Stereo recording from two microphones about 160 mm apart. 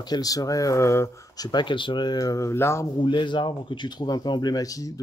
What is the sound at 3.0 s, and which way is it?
Speech, 30° left (ahead or behind).